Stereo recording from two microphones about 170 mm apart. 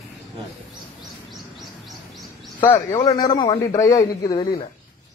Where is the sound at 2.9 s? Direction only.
25° left (ahead or behind).